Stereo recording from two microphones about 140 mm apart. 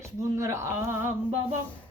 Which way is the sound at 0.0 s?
20° right (ahead or behind).